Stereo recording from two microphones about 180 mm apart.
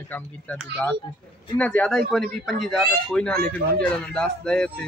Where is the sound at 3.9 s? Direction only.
5° left (ahead or behind).